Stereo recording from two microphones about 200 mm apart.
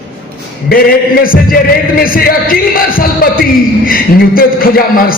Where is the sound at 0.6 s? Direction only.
45° left (ahead or behind).